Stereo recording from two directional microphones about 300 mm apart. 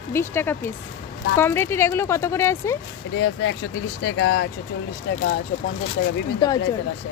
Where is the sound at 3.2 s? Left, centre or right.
Left.